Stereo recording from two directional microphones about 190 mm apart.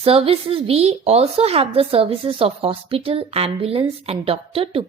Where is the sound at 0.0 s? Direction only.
30° right (ahead or behind).